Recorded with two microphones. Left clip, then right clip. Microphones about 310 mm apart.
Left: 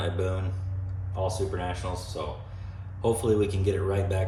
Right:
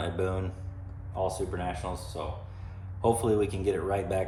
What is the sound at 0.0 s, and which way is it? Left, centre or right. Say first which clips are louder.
Speech: even; centre.